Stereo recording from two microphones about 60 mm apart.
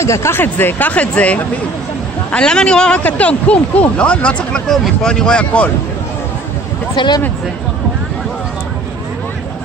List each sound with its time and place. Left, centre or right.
0.0 s speech: left
0.4 s speech: left